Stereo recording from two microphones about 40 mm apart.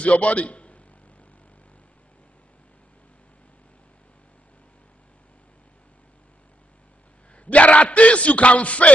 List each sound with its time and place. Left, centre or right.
0.0 s a man's voice: left
7.3 s speech: left